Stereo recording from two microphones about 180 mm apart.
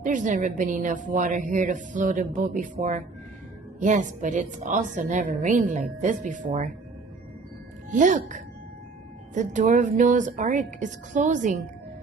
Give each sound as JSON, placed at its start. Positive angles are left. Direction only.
{"t": 0.0, "sound": "a woman's voice", "side_deg": -45}
{"t": 7.9, "sound": "a woman's voice", "side_deg": -45}